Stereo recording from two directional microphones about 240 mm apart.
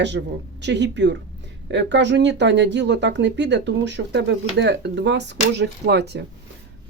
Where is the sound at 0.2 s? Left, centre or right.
Right.